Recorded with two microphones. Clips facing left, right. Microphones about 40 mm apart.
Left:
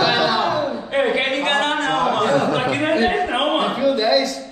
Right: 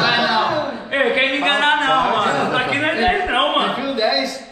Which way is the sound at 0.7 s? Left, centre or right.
Right.